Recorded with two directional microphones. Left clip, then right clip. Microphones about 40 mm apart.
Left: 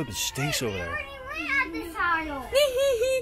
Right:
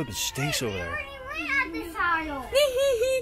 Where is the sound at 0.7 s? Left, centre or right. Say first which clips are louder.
Even; centre.